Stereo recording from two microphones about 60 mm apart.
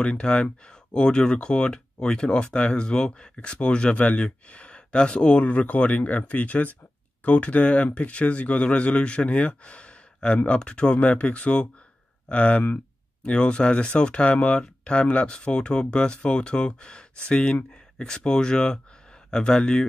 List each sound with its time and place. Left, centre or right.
0.0 s speech: centre